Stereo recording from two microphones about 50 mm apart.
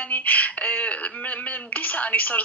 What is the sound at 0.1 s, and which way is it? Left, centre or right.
A woman's voice, left.